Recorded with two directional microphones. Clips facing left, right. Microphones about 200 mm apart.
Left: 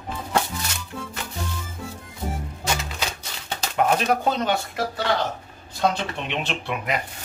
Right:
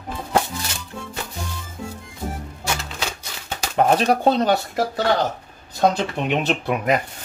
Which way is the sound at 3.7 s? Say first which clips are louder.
Right 4 dB; 35° right (ahead or behind).